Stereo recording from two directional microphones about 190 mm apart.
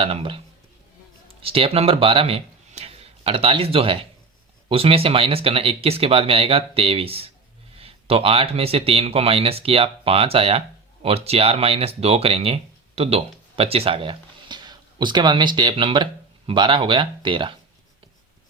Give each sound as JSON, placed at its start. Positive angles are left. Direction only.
{"t": 0.0, "sound": "speech", "side_deg": -30}